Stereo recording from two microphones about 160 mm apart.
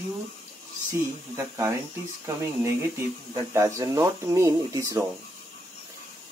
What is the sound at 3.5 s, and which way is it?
Speech, 20° right (ahead or behind).